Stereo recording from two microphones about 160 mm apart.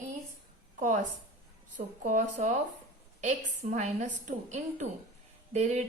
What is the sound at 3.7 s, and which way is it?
A woman's voice, 50° right (ahead or behind).